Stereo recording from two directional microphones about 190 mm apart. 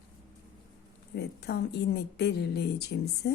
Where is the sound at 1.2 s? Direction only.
60° left (ahead or behind).